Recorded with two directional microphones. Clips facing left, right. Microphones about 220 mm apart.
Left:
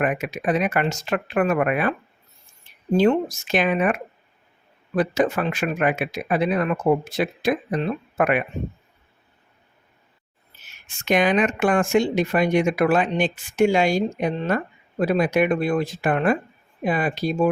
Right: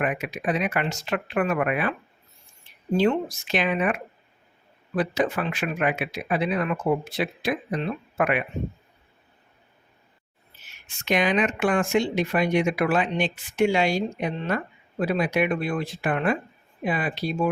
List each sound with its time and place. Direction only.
0.0 s speech: 45° left (ahead or behind)
4.9 s speech: 45° left (ahead or behind)
10.8 s speech: 50° left (ahead or behind)